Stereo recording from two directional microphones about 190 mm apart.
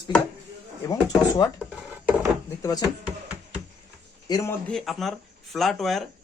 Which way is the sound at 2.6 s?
20° left (ahead or behind).